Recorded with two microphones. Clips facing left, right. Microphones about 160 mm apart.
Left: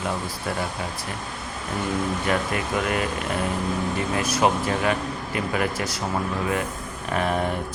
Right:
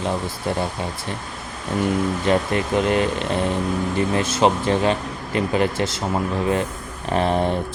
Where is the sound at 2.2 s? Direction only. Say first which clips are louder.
Right 5 dB; 25° right (ahead or behind).